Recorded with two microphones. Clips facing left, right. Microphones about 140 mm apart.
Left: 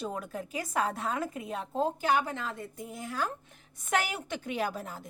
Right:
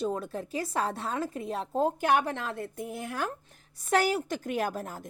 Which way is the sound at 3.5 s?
35° right (ahead or behind).